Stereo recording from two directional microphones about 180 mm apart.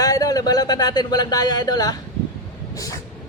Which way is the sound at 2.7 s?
20° left (ahead or behind).